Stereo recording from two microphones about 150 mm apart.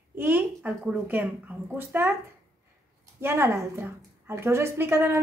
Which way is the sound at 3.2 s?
15° right (ahead or behind).